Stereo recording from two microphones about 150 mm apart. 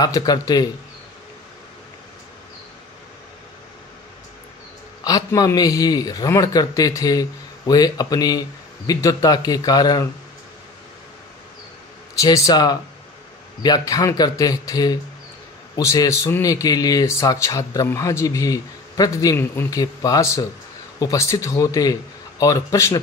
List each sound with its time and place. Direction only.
0.0 s a man's voice: 25° left (ahead or behind)
5.0 s a man's voice: 25° left (ahead or behind)
12.2 s a man's voice: 25° left (ahead or behind)